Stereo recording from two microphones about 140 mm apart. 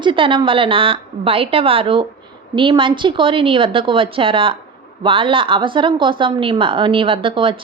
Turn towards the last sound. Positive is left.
turn(degrees=-35)  # may be behind; listen again after turning